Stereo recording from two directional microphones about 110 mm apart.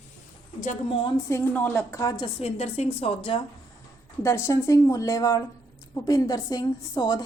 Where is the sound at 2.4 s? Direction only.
70° left (ahead or behind).